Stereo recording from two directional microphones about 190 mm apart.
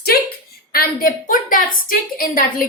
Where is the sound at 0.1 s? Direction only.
50° left (ahead or behind).